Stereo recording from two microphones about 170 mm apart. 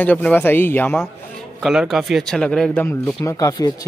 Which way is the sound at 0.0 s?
10° left (ahead or behind).